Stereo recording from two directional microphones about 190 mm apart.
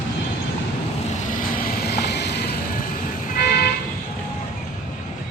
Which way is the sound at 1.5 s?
60° left (ahead or behind).